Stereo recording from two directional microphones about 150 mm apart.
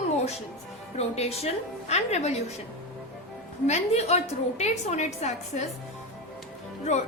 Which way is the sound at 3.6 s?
45° left (ahead or behind).